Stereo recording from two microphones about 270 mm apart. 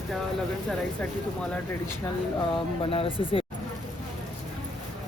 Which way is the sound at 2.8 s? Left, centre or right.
Centre.